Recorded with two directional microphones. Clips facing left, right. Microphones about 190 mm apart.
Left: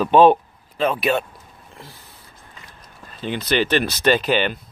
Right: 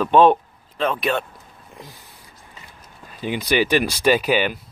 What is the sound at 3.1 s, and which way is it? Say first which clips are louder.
Speech: right 1 dB; 10° right (ahead or behind).